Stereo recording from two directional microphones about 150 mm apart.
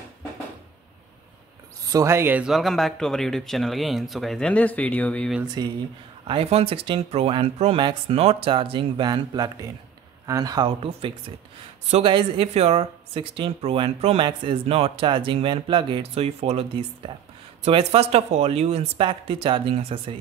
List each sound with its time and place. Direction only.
1.9 s speech: 20° right (ahead or behind); by 5.3 s 10° left (ahead or behind)
5.4 s speech: 25° right (ahead or behind)
6.2 s speech: 40° right (ahead or behind)
10.8 s speech: 40° right (ahead or behind)